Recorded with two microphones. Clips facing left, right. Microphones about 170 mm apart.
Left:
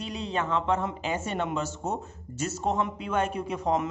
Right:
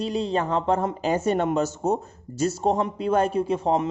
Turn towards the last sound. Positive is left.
turn(degrees=-30)  # may be behind; listen again after turning